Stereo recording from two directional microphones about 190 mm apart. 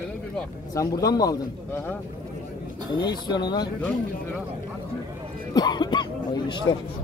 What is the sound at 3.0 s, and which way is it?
Speech, 20° left (ahead or behind).